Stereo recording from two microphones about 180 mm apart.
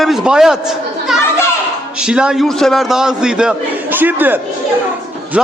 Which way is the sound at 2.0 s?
5° right (ahead or behind).